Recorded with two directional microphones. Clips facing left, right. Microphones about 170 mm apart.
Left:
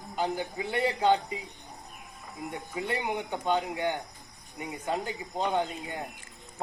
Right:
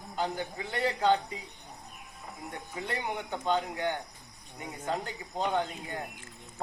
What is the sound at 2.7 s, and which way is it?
A man's voice, 15° left (ahead or behind).